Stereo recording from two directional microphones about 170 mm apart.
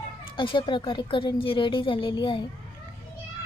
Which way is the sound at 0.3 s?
30° left (ahead or behind).